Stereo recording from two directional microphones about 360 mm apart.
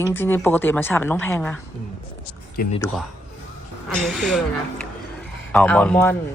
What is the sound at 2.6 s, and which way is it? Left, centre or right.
Speech, left.